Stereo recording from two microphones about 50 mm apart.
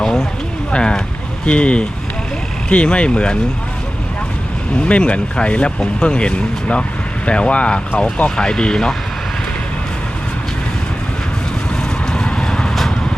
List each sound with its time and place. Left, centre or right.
0.0 s a sound: centre
0.7 s speech: centre
4.9 s speech: left
12.1 s vehicle: centre